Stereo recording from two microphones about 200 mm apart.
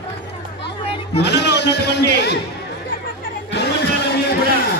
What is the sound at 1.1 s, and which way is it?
Music, 55° left (ahead or behind).